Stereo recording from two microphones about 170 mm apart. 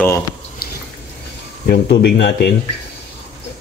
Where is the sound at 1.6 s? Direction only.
75° left (ahead or behind).